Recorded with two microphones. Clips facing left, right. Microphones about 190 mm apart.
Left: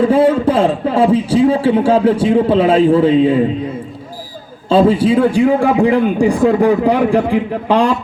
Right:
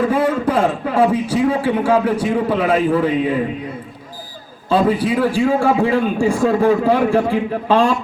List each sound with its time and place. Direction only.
0.0 s a man's voice: 30° left (ahead or behind)
4.7 s a man's voice: 25° left (ahead or behind)